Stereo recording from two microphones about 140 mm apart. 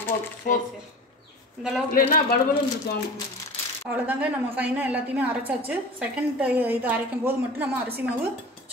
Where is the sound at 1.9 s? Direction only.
90° left.